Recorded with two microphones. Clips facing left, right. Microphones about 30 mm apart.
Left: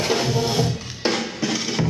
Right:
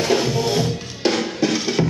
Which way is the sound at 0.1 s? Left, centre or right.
Centre.